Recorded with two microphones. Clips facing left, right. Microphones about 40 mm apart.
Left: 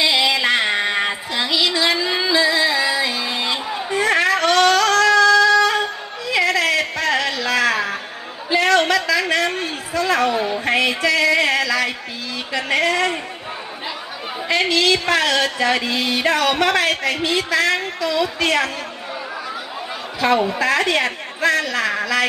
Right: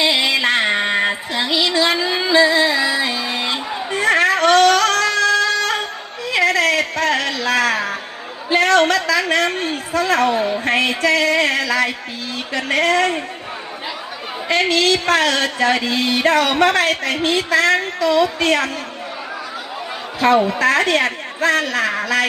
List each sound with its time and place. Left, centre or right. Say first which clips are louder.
0.0 s music: right 1 dB; right
5.0 s a sound: left 4 dB; right
12.5 s speech: right 2 dB; right
14.5 s speech: right 1 dB; right
20.2 s speech: right 3 dB; right